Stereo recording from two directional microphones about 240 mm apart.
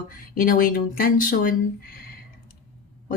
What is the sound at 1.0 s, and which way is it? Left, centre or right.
Speech, left.